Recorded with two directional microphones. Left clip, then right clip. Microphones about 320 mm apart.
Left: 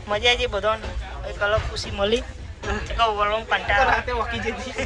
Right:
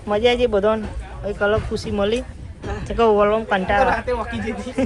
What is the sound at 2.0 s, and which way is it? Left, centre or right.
Speech, centre.